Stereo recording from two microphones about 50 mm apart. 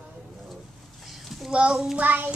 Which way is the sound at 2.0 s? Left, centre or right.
Right.